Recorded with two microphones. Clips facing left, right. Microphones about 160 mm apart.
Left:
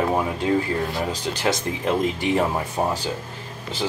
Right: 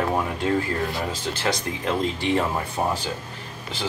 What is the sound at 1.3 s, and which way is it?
Speech, 15° left (ahead or behind).